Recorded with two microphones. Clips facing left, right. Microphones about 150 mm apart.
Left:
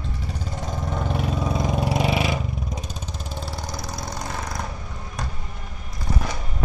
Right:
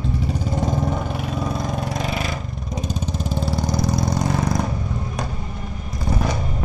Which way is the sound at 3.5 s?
25° right (ahead or behind).